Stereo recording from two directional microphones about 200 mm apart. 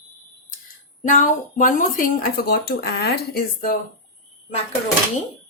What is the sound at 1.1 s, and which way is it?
Speech, 40° left (ahead or behind).